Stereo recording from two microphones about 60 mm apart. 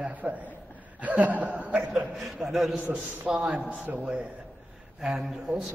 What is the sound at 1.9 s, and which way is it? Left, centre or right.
Speech, centre.